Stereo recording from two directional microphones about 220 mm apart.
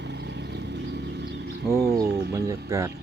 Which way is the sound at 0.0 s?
50° right (ahead or behind).